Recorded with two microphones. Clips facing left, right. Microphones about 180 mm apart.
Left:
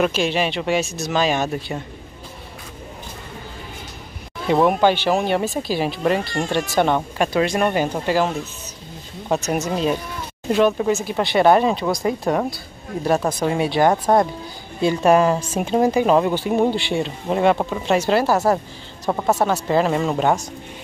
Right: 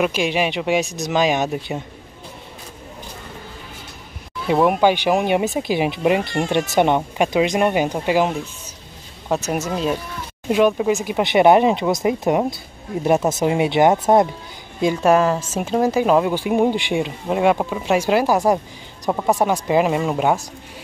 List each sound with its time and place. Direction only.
0.0 s speech: 15° right (ahead or behind)
4.5 s speech: 5° right (ahead or behind); by 14.2 s 20° right (ahead or behind)
15.0 s speech: 5° right (ahead or behind)